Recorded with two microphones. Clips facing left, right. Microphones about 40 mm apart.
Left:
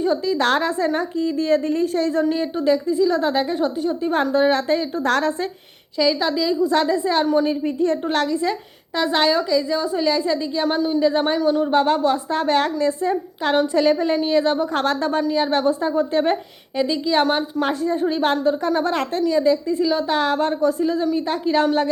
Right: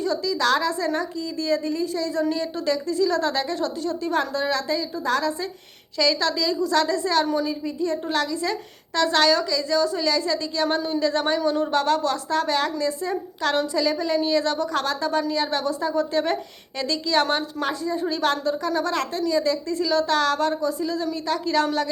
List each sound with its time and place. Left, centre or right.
0.0 s a woman's voice: left
2.3 s a woman's voice: left
5.0 s speech: left
6.0 s a woman's voice: centre
7.4 s a woman's voice: left
9.0 s a woman's voice: centre
11.3 s speech: centre
11.7 s a woman's voice: left
13.7 s a woman's voice: left
15.3 s a woman's voice: left
17.3 s a woman's voice: left
20.6 s a woman's voice: left